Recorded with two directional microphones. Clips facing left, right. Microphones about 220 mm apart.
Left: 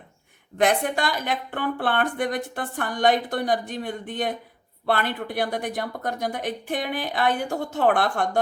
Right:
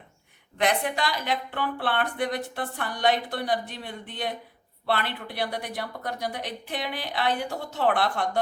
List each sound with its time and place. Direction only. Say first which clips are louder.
0.6 s a woman's voice: left 4 dB; 50° left (ahead or behind)